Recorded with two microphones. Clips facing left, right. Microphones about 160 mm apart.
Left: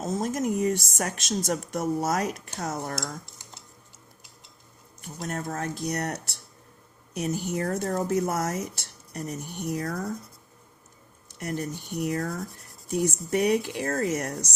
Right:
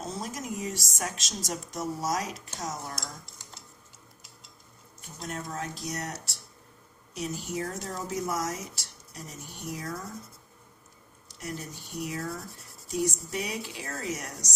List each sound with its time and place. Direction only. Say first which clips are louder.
0.0 s speech: left 9 dB; 45° left (ahead or behind)
5.3 s speech: left 4 dB; 55° left (ahead or behind); by 10.1 s 70° left (ahead or behind)
11.3 s speech: left 7 dB; 60° left (ahead or behind)